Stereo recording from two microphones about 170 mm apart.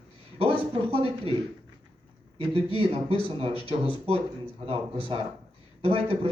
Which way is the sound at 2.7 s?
35° right (ahead or behind).